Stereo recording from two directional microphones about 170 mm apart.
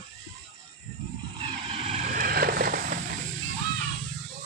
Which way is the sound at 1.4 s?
30° right (ahead or behind).